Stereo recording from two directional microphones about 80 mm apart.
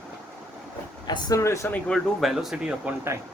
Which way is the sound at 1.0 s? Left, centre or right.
Left.